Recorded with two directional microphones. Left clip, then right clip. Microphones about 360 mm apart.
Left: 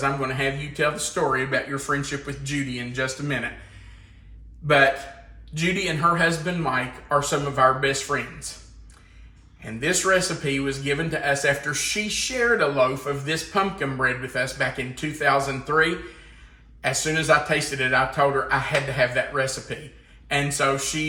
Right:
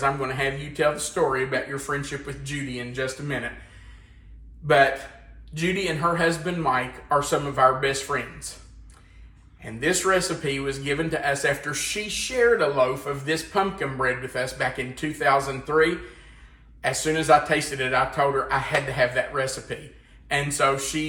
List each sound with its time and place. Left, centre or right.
0.0 s a man's voice: centre
4.6 s a man's voice: centre
9.6 s a man's voice: centre